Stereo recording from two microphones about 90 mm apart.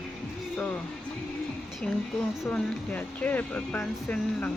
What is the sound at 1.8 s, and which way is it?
A woman's voice, 15° left (ahead or behind).